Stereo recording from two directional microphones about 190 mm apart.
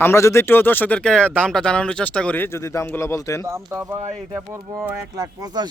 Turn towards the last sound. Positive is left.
turn(degrees=-20)  # may be behind; listen again after turning